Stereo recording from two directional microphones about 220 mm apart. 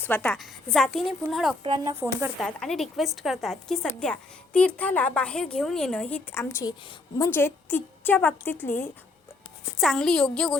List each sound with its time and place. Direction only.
0.0 s a woman's voice: 5° left (ahead or behind)
1.6 s speech: 20° right (ahead or behind)
2.4 s a woman's voice: 5° left (ahead or behind)